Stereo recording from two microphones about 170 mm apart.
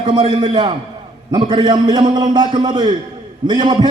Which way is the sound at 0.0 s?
30° right (ahead or behind).